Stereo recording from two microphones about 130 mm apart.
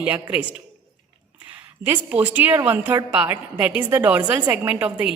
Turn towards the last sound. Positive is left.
turn(degrees=-10)  # may be behind; listen again after turning